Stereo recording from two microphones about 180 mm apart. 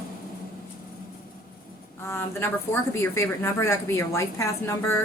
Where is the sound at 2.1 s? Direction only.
15° left (ahead or behind).